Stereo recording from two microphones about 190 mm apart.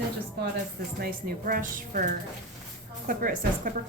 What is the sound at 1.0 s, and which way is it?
Speech, 50° right (ahead or behind).